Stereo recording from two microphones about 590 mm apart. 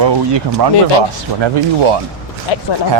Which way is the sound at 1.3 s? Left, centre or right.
Right.